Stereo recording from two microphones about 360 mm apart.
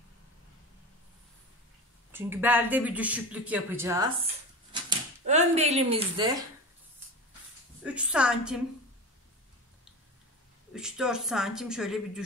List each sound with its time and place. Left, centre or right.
2.1 s speech: centre
7.8 s speech: centre
10.7 s speech: centre